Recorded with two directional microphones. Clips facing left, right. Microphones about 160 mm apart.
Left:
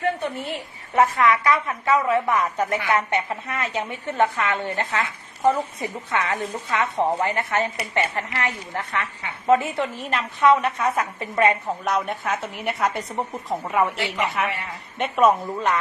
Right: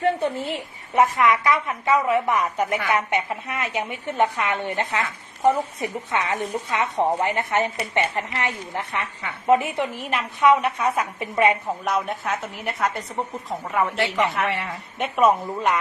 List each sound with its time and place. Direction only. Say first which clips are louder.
0.0 s a woman's voice: right 3 dB; 25° right (ahead or behind)
11.9 s a woman's voice: left 1 dB; centre (ahead or behind)